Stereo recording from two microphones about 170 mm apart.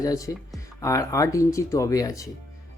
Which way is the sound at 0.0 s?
20° left (ahead or behind).